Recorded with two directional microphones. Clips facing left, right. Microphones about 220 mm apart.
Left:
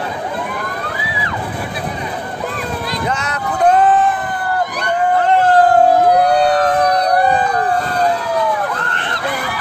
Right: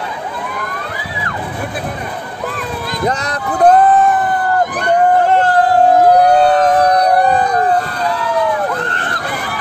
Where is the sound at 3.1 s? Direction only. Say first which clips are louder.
Right 2 dB; 35° right (ahead or behind).